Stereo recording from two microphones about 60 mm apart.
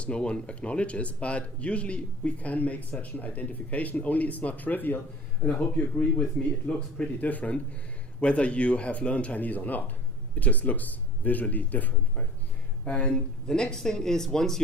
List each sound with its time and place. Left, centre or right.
0.0 s speech: centre
13.5 s speech: centre